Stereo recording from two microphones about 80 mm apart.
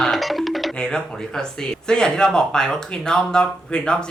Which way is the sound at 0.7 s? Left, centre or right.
Centre.